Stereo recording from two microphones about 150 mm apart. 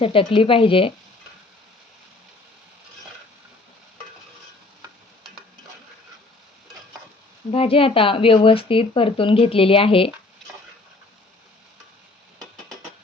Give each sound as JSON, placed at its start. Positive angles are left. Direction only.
{"t": 0.0, "sound": "speech", "side_deg": 35}
{"t": 7.5, "sound": "speech", "side_deg": 40}